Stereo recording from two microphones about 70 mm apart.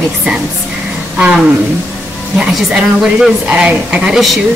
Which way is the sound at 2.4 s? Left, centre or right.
Centre.